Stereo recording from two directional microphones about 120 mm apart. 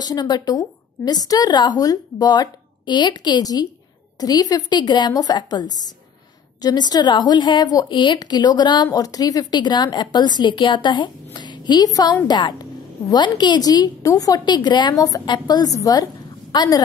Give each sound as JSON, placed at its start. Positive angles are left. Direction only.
{"t": 0.0, "sound": "a woman's voice", "side_deg": 35}